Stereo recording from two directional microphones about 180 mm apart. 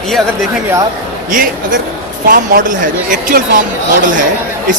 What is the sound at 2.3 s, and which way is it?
Speech, 50° right (ahead or behind).